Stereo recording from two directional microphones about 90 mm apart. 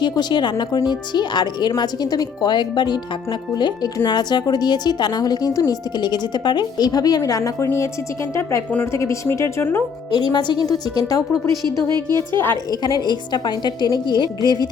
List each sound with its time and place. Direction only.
0.0 s a woman's voice: 55° left (ahead or behind)
4.0 s a woman's voice: 50° left (ahead or behind)
8.4 s a woman's voice: 30° left (ahead or behind)
10.1 s a woman's voice: 55° left (ahead or behind)
11.6 s a woman's voice: 45° right (ahead or behind)
12.3 s speech: 25° left (ahead or behind)
12.8 s a woman's voice: 50° left (ahead or behind)